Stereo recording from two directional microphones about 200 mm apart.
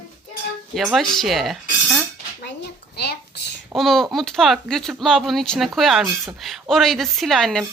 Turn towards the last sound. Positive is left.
turn(degrees=0)  # may be behind; listen again after turning